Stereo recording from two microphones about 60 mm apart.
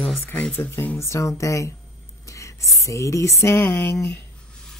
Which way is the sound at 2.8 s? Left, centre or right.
Left.